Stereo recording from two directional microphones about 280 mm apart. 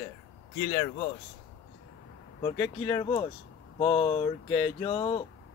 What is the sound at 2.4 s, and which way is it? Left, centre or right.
Speech, centre.